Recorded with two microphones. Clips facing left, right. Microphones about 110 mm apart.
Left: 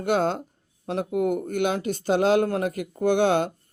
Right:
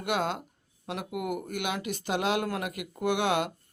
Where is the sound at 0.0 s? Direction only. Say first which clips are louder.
Left 6 dB; 35° left (ahead or behind).